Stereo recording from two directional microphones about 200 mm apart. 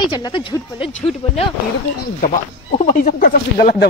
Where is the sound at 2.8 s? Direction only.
40° left (ahead or behind).